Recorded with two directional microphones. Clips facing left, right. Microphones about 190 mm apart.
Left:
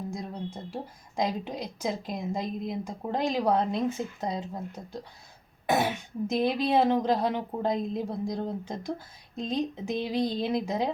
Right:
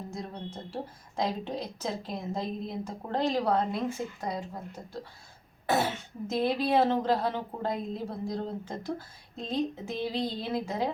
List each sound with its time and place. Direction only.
0.1 s speech: 10° left (ahead or behind)
5.6 s speech: 15° left (ahead or behind)